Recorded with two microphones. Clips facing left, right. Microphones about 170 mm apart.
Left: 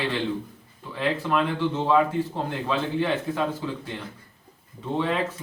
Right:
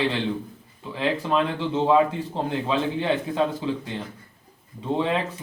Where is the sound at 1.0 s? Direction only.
15° right (ahead or behind).